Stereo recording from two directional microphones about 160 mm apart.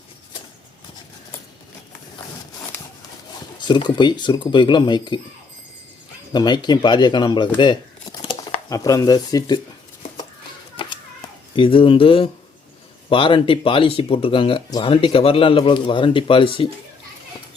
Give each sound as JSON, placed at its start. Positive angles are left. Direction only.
{"t": 3.6, "sound": "speech", "side_deg": 30}
{"t": 6.3, "sound": "speech", "side_deg": 25}
{"t": 10.8, "sound": "a sound", "side_deg": 30}
{"t": 11.5, "sound": "speech", "side_deg": 35}